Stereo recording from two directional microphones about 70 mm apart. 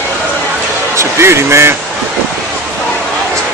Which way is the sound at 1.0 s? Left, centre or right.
Right.